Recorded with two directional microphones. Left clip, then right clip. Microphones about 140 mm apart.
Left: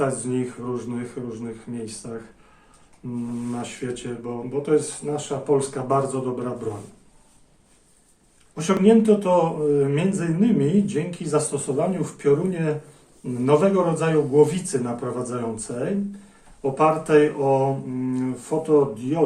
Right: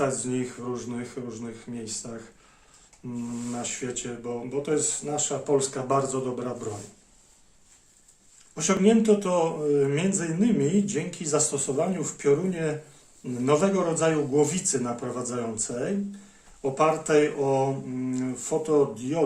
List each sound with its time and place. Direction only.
0.0 s speech: 30° right (ahead or behind)
3.0 s speech: 25° right (ahead or behind)
8.5 s speech: 20° right (ahead or behind)